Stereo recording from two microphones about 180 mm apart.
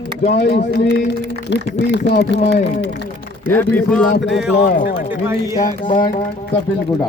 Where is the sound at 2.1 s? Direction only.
70° left (ahead or behind).